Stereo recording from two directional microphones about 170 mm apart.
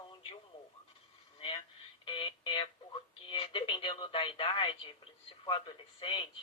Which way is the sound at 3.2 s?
30° left (ahead or behind).